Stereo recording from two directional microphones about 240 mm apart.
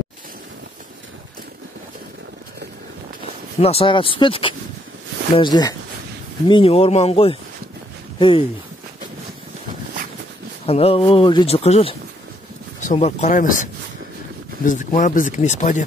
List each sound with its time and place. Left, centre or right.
3.5 s speech: left
10.6 s speech: left